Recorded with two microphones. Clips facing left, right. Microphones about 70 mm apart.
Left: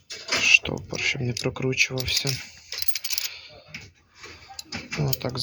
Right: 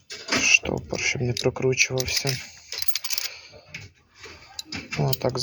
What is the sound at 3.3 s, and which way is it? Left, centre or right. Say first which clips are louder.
Computer keyboard: even; centre.